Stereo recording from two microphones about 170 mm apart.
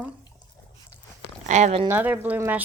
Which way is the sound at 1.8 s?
10° right (ahead or behind).